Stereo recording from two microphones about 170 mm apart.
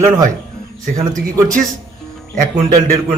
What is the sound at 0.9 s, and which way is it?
Speech, 20° right (ahead or behind).